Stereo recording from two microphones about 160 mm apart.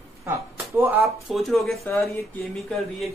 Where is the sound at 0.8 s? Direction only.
15° right (ahead or behind).